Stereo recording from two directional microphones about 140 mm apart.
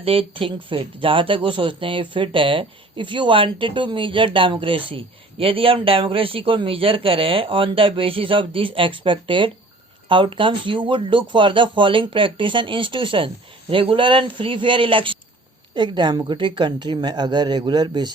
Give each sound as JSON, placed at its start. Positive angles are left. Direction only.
{"t": 0.0, "sound": "speech", "side_deg": -40}